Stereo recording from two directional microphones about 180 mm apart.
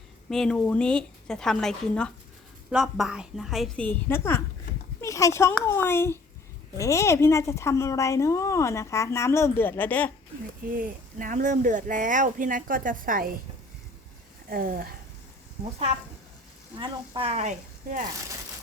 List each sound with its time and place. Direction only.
0.3 s a woman's voice: 5° left (ahead or behind)
10.7 s speech: 50° right (ahead or behind)
14.5 s speech: 55° right (ahead or behind)
16.7 s speech: 30° right (ahead or behind)